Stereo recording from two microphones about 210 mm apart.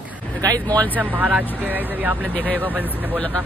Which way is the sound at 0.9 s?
10° right (ahead or behind).